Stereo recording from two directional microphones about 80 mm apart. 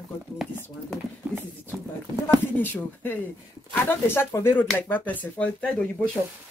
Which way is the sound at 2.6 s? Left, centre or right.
Left.